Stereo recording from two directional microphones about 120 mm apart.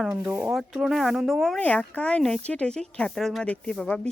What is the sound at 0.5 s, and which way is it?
Speech, 5° right (ahead or behind).